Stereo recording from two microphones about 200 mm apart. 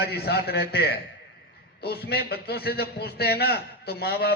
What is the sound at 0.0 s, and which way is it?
A man's voice, 55° left (ahead or behind).